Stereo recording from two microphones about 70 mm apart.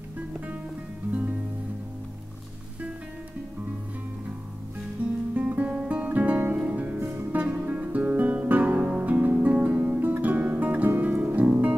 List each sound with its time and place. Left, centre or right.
1.1 s music: right
5.3 s music: right
7.2 s guitar: right